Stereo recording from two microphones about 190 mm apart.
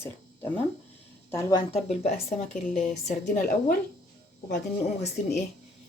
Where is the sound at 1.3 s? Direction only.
15° left (ahead or behind).